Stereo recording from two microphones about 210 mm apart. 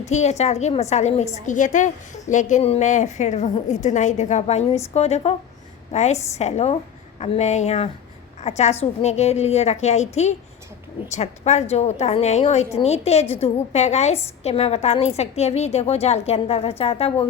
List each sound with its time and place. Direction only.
0.1 s a woman's voice: 30° left (ahead or behind)